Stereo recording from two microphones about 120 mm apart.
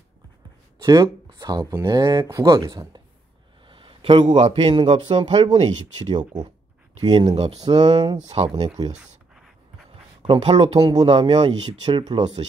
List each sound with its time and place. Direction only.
0.8 s speech: 35° right (ahead or behind)
3.6 s a man's voice: 45° right (ahead or behind)
8.2 s speech: 60° right (ahead or behind)
8.6 s speech: 35° right (ahead or behind)
8.9 s a sound: 5° right (ahead or behind)
10.2 s speech: 40° right (ahead or behind)